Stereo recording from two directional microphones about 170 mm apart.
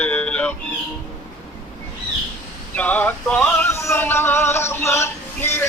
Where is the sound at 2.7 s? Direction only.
10° left (ahead or behind).